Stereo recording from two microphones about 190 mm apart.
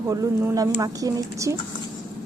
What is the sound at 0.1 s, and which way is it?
A woman's voice, 15° right (ahead or behind).